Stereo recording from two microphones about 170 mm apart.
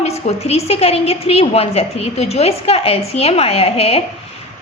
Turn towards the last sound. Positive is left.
turn(degrees=35)  # may be behind; listen again after turning